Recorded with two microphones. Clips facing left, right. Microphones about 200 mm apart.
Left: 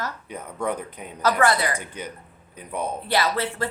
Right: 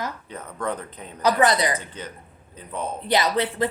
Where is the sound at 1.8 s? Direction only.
10° left (ahead or behind).